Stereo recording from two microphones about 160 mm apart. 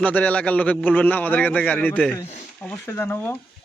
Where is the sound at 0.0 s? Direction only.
10° left (ahead or behind).